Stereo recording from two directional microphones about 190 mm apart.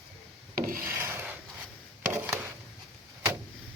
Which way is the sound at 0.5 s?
50° right (ahead or behind).